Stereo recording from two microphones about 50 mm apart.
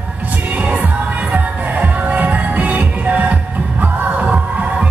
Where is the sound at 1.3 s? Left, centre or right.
Right.